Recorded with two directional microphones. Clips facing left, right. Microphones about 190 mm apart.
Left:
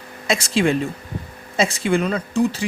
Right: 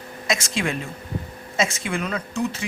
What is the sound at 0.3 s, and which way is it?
Speech, 35° left (ahead or behind).